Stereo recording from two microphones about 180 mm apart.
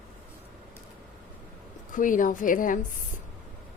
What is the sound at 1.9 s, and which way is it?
Speech, 45° left (ahead or behind).